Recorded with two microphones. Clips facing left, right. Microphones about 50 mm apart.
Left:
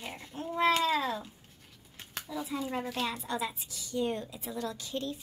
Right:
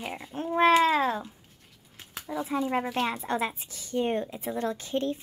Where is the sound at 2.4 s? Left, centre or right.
Right.